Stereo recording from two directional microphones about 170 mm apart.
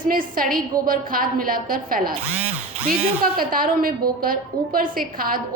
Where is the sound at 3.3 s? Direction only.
60° right (ahead or behind).